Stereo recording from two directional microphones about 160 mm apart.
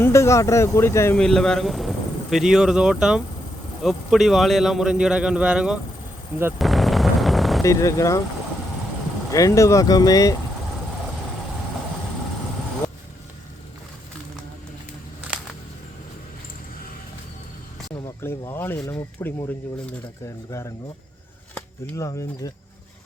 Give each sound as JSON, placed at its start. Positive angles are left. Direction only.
{"t": 0.0, "sound": "speech", "side_deg": 15}
{"t": 1.2, "sound": "a man's voice", "side_deg": 5}
{"t": 6.6, "sound": "a sound", "side_deg": 0}
{"t": 7.6, "sound": "speech", "side_deg": 20}
{"t": 9.3, "sound": "speech", "side_deg": 20}
{"t": 18.2, "sound": "a sound", "side_deg": 15}
{"t": 18.9, "sound": "speech", "side_deg": 20}